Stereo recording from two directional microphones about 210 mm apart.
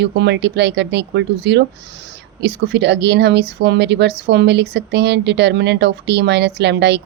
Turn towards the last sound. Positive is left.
turn(degrees=-55)  # may be behind; listen again after turning